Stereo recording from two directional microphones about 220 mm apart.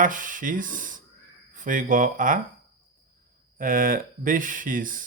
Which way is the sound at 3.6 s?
40° right (ahead or behind).